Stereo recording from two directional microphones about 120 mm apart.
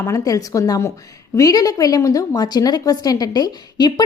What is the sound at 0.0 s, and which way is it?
A woman's voice, 25° left (ahead or behind).